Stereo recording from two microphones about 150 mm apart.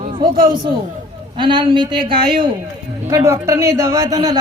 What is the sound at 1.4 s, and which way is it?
A man's voice, 35° right (ahead or behind).